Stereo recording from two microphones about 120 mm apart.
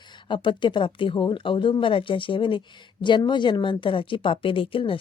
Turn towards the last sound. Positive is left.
turn(degrees=50)  # may be behind; listen again after turning